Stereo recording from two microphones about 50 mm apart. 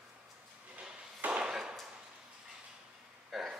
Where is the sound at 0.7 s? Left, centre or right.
Right.